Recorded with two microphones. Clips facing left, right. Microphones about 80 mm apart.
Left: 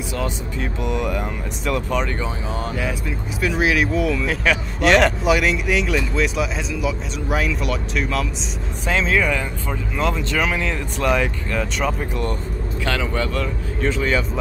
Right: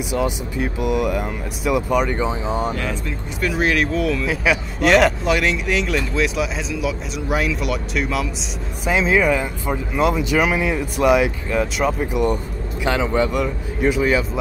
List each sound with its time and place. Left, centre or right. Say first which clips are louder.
0.1 s speech: right 4 dB; centre
2.7 s speech: even; centre